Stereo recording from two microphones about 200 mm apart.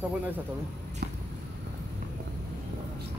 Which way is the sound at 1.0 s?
55° right (ahead or behind).